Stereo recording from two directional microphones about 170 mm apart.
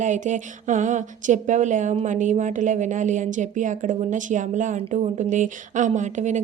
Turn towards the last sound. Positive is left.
turn(degrees=-45)  # may be behind; listen again after turning